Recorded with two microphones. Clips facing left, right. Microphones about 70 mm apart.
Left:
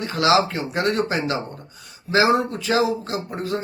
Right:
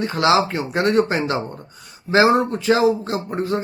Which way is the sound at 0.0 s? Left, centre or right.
Right.